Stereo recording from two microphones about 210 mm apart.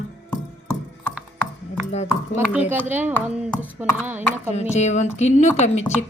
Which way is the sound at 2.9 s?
10° right (ahead or behind).